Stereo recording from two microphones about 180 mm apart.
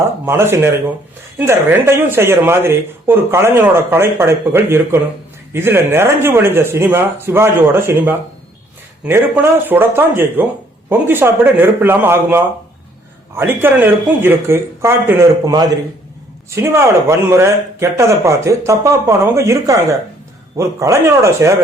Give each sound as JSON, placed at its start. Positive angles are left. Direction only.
{"t": 0.3, "sound": "speech", "side_deg": -15}